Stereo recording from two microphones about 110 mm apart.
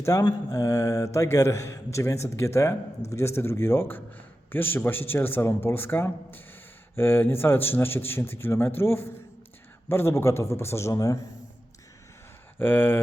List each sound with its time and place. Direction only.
0.0 s a man's voice: 30° left (ahead or behind)
12.5 s speech: 15° left (ahead or behind)